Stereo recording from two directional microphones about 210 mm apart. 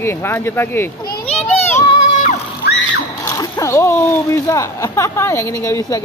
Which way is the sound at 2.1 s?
35° left (ahead or behind).